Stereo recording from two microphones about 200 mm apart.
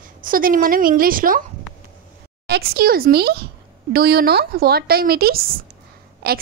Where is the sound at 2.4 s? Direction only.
50° right (ahead or behind).